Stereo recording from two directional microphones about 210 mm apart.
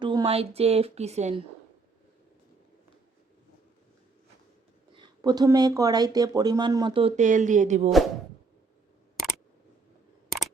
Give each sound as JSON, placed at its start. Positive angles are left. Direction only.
{"t": 0.0, "sound": "speech", "side_deg": -20}
{"t": 4.9, "sound": "speech", "side_deg": -20}